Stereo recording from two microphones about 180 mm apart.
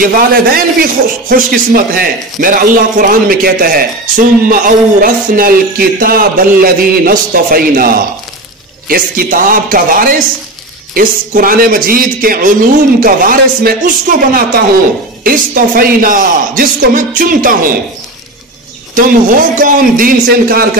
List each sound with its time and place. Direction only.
0.0 s a man's voice: 55° right (ahead or behind)
18.9 s a man's voice: 50° right (ahead or behind)